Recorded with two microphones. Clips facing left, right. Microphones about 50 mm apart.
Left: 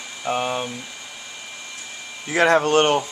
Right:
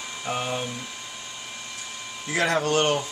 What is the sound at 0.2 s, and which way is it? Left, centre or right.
Speech, left.